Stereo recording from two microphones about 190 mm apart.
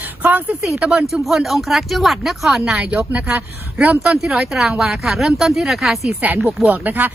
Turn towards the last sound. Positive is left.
turn(degrees=-10)  # may be behind; listen again after turning